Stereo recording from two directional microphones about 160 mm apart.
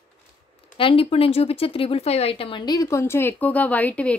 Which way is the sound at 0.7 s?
35° left (ahead or behind).